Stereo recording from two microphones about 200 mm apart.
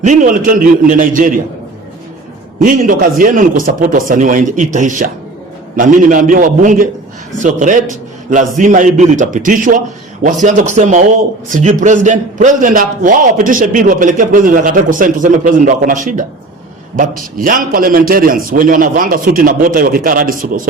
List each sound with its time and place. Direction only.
0.0 s a man's voice: 40° right (ahead or behind)
2.6 s a man's voice: 45° right (ahead or behind)